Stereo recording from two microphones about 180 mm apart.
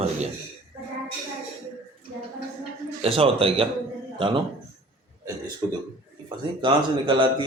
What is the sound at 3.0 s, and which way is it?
A man's voice, 30° right (ahead or behind).